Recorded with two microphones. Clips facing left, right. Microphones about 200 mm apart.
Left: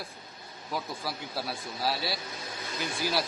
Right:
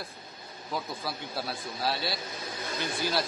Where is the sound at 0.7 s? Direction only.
5° left (ahead or behind).